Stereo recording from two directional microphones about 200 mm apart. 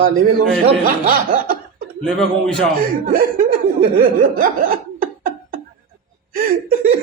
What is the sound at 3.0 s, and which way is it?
Chuckle, 45° right (ahead or behind).